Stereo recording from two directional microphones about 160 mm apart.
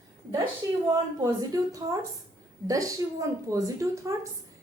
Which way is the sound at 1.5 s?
20° right (ahead or behind).